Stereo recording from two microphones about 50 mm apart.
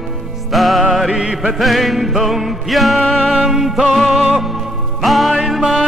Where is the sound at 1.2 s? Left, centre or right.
Centre.